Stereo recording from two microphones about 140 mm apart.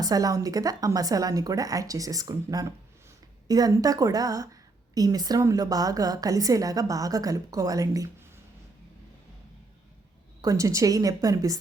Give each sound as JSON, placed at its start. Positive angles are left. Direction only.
{"t": 0.0, "sound": "a woman's voice", "side_deg": -25}
{"t": 10.4, "sound": "a woman's voice", "side_deg": -25}